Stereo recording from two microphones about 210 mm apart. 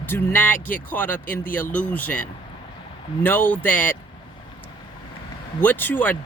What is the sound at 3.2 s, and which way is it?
Speech, 10° left (ahead or behind).